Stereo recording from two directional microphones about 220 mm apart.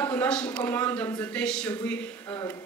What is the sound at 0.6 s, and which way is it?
A woman's voice, 10° left (ahead or behind).